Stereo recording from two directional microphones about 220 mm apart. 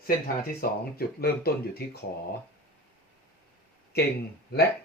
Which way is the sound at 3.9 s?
45° left (ahead or behind).